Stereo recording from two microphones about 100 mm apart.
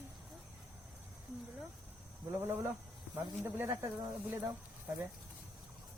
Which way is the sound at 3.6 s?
40° right (ahead or behind).